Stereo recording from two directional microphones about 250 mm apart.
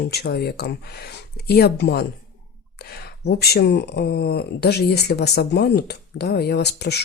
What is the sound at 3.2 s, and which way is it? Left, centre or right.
Speech, left.